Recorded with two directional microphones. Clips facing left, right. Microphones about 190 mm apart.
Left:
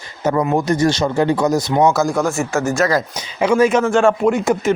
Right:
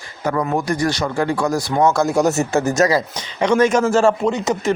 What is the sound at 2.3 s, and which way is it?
Speech, 35° right (ahead or behind).